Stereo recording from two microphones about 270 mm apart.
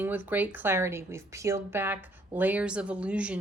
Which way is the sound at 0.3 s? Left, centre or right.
Centre.